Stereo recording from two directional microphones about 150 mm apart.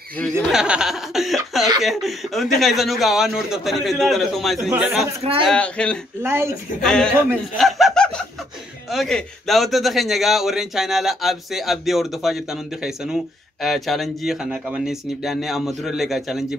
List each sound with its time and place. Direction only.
0.2 s speech: 5° right (ahead or behind)
4.6 s a man's voice: 10° right (ahead or behind)
4.9 s speech: 45° right (ahead or behind)
5.4 s speech: 5° left (ahead or behind)
6.2 s a man's voice: 15° right (ahead or behind)
6.8 s speech: 5° left (ahead or behind)